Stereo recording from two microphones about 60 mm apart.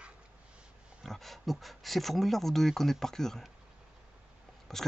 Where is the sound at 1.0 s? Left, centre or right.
Centre.